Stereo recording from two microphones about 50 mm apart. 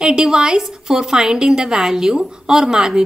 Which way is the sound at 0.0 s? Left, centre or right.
Centre.